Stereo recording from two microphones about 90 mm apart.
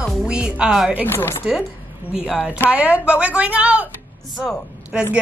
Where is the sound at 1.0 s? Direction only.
25° left (ahead or behind).